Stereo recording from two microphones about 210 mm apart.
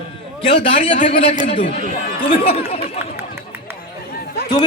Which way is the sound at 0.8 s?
30° left (ahead or behind).